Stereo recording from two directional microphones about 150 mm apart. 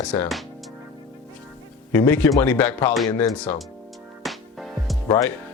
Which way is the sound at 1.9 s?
15° left (ahead or behind).